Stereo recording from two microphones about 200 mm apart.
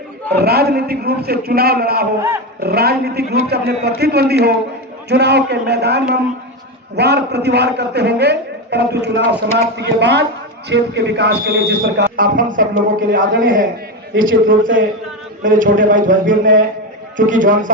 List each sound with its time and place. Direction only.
0.3 s a man's voice: 50° right (ahead or behind)